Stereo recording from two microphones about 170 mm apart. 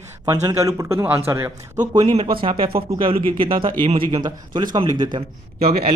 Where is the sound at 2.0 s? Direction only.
35° right (ahead or behind).